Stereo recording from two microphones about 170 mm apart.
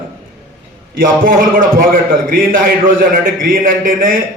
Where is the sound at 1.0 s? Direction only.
55° right (ahead or behind).